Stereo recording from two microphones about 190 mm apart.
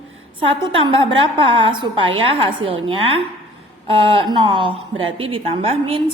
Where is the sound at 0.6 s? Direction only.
25° right (ahead or behind).